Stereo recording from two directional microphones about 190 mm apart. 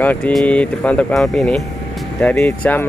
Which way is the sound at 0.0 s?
10° left (ahead or behind).